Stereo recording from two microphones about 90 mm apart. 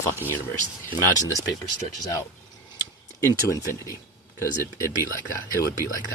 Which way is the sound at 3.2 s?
35° left (ahead or behind).